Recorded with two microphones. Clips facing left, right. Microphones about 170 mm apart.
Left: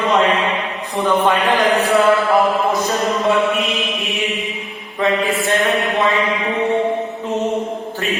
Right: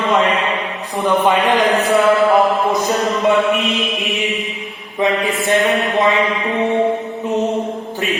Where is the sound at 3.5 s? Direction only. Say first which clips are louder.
Right 2 dB; 20° right (ahead or behind).